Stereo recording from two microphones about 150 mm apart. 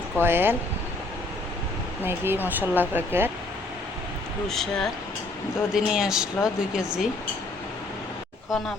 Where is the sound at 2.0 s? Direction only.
15° right (ahead or behind).